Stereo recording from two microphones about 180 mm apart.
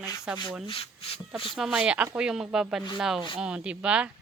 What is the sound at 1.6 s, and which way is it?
Speech, 5° right (ahead or behind).